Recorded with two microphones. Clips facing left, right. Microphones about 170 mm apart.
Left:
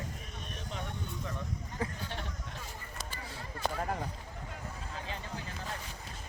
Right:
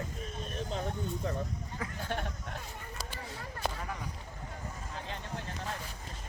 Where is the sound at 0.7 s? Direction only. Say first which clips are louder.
Right 4 dB; 35° right (ahead or behind).